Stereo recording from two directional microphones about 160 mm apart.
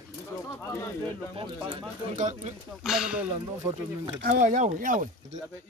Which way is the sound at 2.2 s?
50° right (ahead or behind).